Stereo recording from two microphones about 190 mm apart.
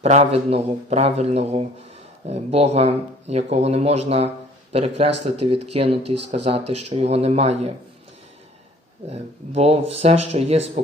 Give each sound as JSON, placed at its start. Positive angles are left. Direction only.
{"t": 0.0, "sound": "speech", "side_deg": -35}
{"t": 9.0, "sound": "speech", "side_deg": -35}